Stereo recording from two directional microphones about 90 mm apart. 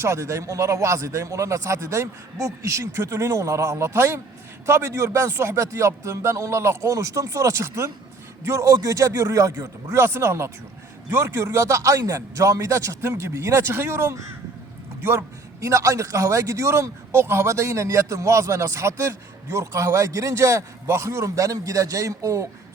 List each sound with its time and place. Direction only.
0.0 s a man's voice: 35° right (ahead or behind)
15.6 s a man's voice: 35° right (ahead or behind)